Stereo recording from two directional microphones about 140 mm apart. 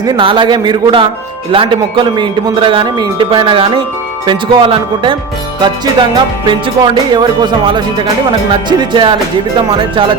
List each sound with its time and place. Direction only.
0.0 s music: 35° right (ahead or behind)